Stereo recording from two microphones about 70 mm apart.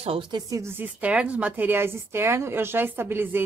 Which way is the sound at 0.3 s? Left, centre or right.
Right.